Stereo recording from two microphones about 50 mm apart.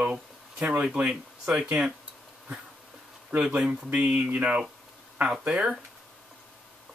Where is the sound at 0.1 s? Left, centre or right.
Right.